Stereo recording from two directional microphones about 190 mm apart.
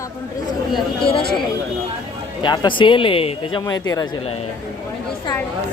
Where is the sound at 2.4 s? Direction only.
25° left (ahead or behind).